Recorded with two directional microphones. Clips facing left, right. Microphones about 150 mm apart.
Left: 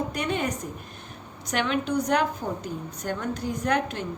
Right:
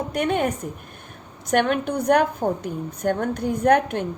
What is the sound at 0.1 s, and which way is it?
A woman's voice, 55° right (ahead or behind).